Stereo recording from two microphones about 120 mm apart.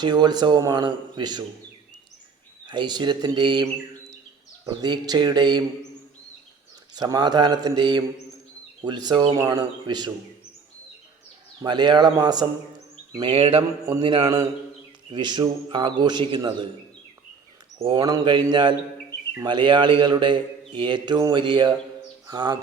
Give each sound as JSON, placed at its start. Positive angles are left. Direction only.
{"t": 0.0, "sound": "a man's voice", "side_deg": -35}
{"t": 2.6, "sound": "a man's voice", "side_deg": -40}
{"t": 6.9, "sound": "a man's voice", "side_deg": -35}
{"t": 11.6, "sound": "a man's voice", "side_deg": -40}
{"t": 13.2, "sound": "mantra", "side_deg": -50}
{"t": 15.1, "sound": "a man's voice", "side_deg": -40}
{"t": 17.7, "sound": "a man's voice", "side_deg": -40}